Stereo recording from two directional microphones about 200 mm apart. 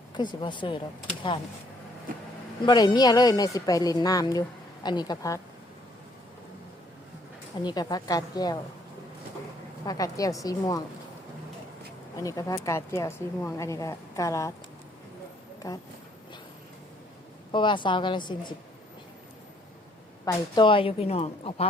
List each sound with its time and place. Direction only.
0.1 s a woman's voice: 20° left (ahead or behind)
2.6 s a woman's voice: 20° left (ahead or behind)
7.6 s a woman's voice: 20° left (ahead or behind)
9.8 s speech: 15° left (ahead or behind)
12.2 s speech: 15° left (ahead or behind)
15.6 s speech: 15° left (ahead or behind)
17.5 s a woman's voice: 25° left (ahead or behind)
20.2 s a woman's voice: 25° left (ahead or behind)